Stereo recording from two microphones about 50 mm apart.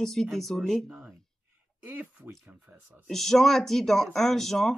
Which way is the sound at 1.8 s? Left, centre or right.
Right.